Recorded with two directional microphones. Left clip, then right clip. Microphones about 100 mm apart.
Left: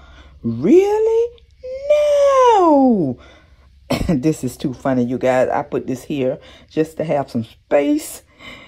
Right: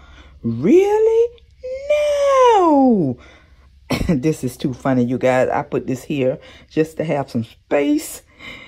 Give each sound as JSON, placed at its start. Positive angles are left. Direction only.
{"t": 0.7, "sound": "speech", "side_deg": 35}
{"t": 0.9, "sound": "speech", "side_deg": 15}
{"t": 1.6, "sound": "baby cry", "side_deg": 20}
{"t": 2.3, "sound": "a sound", "side_deg": 15}
{"t": 3.8, "sound": "speech", "side_deg": 30}
{"t": 4.6, "sound": "speech", "side_deg": 10}